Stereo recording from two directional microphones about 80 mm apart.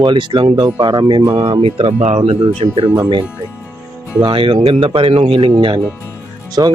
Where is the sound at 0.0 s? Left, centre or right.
Right.